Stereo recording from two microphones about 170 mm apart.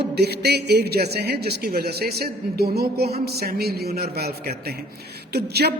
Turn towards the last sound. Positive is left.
turn(degrees=-70)  # may be behind; listen again after turning